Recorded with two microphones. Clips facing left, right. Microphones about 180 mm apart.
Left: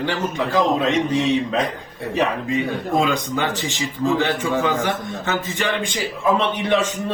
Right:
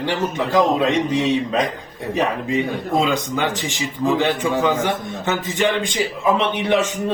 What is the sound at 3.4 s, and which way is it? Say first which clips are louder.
A man's voice: right 1 dB; 15° right (ahead or behind).